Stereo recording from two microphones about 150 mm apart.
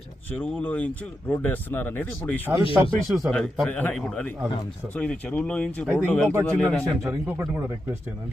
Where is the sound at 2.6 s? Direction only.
35° left (ahead or behind).